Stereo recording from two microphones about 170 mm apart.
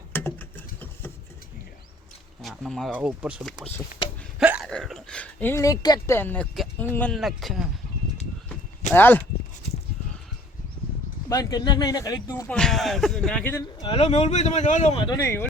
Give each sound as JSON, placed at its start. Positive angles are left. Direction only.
{"t": 0.1, "sound": "patter", "side_deg": 10}
{"t": 2.4, "sound": "speech", "side_deg": 0}
{"t": 4.4, "sound": "a sound", "side_deg": -5}
{"t": 6.1, "sound": "speech", "side_deg": 10}
{"t": 7.1, "sound": "speech", "side_deg": 0}
{"t": 8.9, "sound": "speech", "side_deg": 10}
{"t": 11.3, "sound": "speech", "side_deg": 20}
{"t": 12.5, "sound": "speech", "side_deg": 5}
{"t": 13.9, "sound": "speech", "side_deg": 40}
{"t": 15.1, "sound": "speech", "side_deg": 15}